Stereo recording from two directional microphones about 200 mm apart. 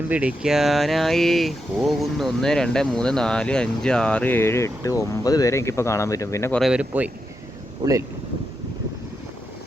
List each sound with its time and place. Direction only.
0.1 s speech: 5° right (ahead or behind); by 6.6 s 15° left (ahead or behind)
6.6 s speech: 5° right (ahead or behind)
7.8 s speech: 20° right (ahead or behind)